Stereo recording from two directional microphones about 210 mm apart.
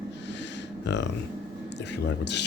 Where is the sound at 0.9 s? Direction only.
55° left (ahead or behind).